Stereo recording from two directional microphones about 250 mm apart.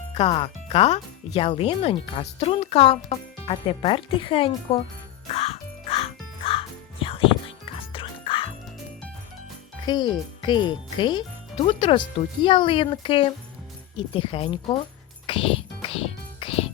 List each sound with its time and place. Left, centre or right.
0.1 s speech: left
5.3 s music: left
9.8 s speech: centre
15.3 s music: left